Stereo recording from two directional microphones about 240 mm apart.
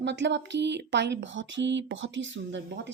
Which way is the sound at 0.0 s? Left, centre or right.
Right.